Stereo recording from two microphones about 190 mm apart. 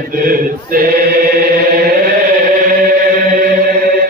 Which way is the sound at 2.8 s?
50° right (ahead or behind).